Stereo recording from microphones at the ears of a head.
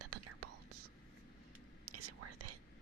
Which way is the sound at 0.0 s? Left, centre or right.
Right.